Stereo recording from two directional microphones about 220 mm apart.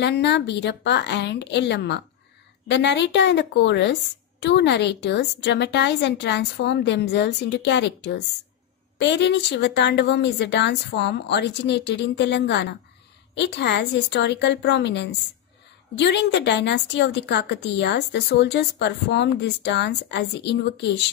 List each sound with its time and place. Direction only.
0.0 s a woman's voice: 50° left (ahead or behind)